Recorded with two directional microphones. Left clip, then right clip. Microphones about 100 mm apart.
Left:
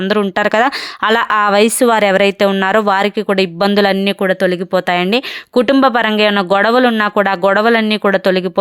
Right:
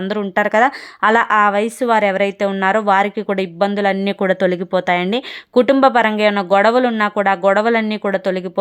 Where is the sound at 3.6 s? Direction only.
40° left (ahead or behind).